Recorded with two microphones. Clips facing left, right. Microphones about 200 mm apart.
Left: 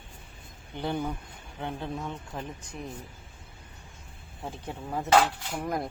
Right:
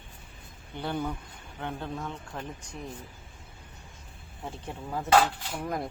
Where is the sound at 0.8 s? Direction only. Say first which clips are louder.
Left 1 dB; 15° left (ahead or behind).